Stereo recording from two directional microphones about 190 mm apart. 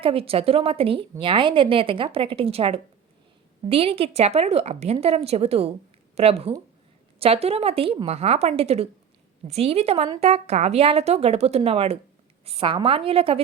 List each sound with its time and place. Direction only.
0.0 s a woman's voice: 30° right (ahead or behind)